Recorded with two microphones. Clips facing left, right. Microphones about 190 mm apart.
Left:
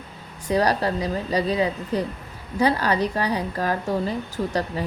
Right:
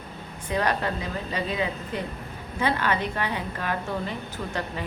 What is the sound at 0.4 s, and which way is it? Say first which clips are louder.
Speech: left 5 dB; 35° left (ahead or behind).